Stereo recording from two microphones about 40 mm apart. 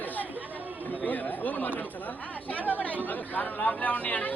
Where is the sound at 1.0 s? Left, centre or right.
Left.